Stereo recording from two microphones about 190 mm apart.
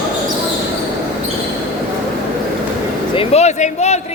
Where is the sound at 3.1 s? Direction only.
35° left (ahead or behind).